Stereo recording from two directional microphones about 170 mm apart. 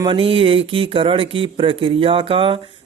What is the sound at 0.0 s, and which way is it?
Speech, 30° right (ahead or behind).